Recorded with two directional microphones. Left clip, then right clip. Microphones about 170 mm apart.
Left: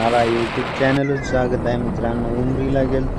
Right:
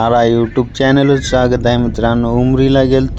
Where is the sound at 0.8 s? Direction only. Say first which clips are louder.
Right 8 dB; 45° right (ahead or behind).